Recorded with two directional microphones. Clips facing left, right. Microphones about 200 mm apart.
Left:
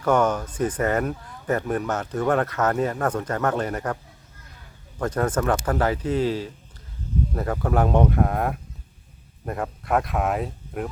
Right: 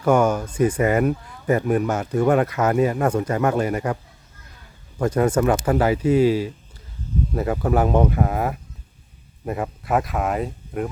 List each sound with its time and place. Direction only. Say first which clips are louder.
0.0 s speech: right 3 dB; 10° right (ahead or behind)
4.9 s speech: right 5 dB; 10° right (ahead or behind)